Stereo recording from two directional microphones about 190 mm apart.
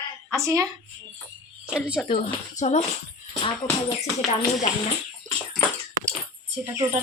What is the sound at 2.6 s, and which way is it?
Speech, 40° left (ahead or behind).